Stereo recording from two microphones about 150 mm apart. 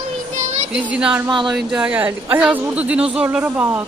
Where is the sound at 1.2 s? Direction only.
30° right (ahead or behind).